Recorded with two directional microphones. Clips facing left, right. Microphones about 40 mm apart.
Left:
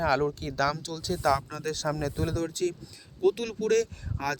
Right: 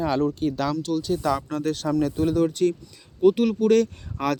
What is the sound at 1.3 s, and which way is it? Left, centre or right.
Speech, right.